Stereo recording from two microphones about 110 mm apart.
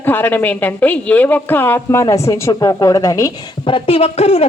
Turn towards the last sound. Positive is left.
turn(degrees=65)  # may be behind; listen again after turning